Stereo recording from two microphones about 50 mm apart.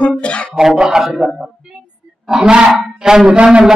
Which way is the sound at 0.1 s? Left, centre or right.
Left.